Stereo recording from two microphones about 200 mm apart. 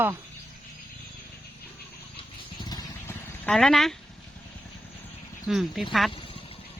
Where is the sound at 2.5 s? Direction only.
20° left (ahead or behind).